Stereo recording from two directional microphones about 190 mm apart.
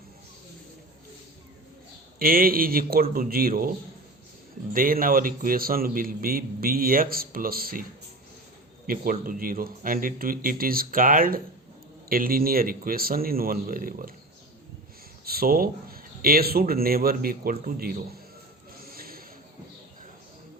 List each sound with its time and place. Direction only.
2.1 s a man's voice: 50° right (ahead or behind)
8.9 s a man's voice: 45° right (ahead or behind)
15.2 s a man's voice: 50° right (ahead or behind)
18.9 s a sound: 50° right (ahead or behind)